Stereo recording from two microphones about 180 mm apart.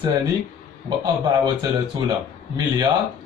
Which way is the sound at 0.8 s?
25° right (ahead or behind).